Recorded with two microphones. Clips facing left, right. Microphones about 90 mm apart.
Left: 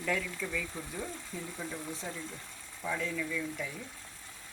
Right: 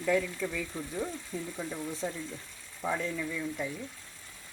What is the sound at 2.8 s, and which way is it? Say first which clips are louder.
Speech: right 2 dB; 35° right (ahead or behind).